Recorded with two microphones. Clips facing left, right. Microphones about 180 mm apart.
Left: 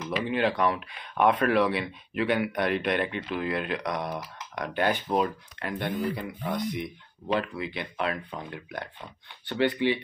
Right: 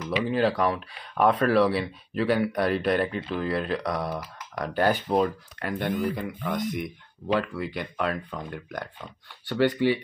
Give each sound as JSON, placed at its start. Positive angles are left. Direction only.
{"t": 0.2, "sound": "speech", "side_deg": -35}